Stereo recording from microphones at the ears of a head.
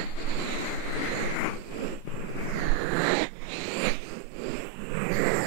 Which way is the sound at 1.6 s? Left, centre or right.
Right.